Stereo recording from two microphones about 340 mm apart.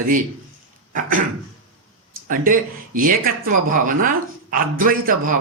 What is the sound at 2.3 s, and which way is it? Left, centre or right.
Speech, right.